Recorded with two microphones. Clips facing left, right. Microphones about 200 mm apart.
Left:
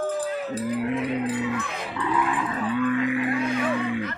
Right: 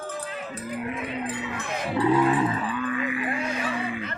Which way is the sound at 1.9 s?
35° right (ahead or behind).